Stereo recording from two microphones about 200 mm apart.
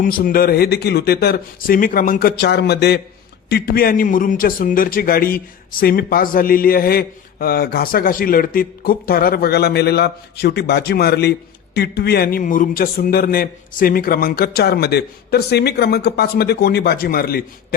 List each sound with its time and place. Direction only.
0.0 s a man's voice: 45° left (ahead or behind)